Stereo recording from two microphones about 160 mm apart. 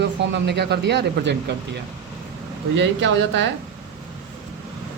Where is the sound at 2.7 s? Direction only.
90° right.